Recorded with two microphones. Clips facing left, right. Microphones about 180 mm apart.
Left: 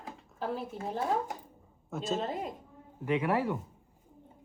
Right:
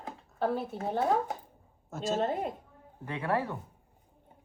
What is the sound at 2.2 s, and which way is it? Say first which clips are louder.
Speech: right 4 dB; 40° right (ahead or behind).